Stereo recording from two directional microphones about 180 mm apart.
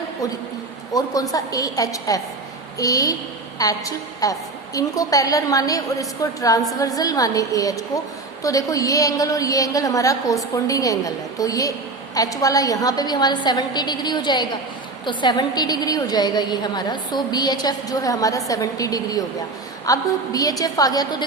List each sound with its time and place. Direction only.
0.9 s a woman's voice: 20° left (ahead or behind)